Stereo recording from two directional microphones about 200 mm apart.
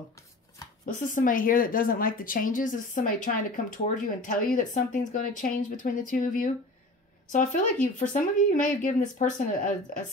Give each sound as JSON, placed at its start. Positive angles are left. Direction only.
{"t": 0.8, "sound": "speech", "side_deg": 40}